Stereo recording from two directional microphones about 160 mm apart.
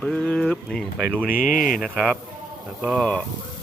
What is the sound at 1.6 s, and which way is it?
Speech, centre (ahead or behind).